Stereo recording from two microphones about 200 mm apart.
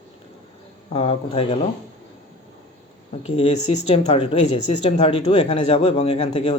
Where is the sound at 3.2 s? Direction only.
25° left (ahead or behind).